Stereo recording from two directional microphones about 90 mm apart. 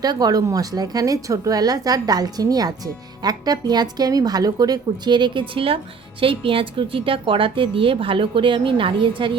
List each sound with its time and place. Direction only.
0.0 s a woman's voice: 45° right (ahead or behind); by 9.3 s 70° right (ahead or behind)